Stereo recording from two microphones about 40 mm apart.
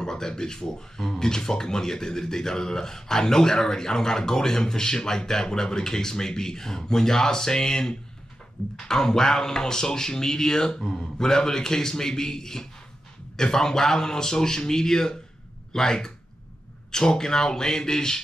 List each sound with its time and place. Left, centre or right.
0.0 s speech: centre
10.8 s speech: centre
11.1 s speech: centre